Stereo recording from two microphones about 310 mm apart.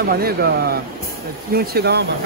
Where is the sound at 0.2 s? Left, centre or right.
Right.